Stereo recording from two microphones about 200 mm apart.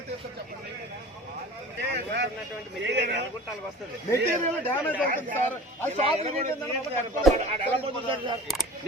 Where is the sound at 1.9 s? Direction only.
60° right (ahead or behind).